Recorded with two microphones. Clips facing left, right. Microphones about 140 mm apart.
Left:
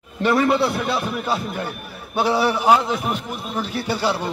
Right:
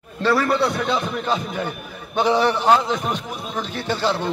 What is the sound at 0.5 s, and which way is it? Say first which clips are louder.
A man's voice: left 1 dB; 5° left (ahead or behind).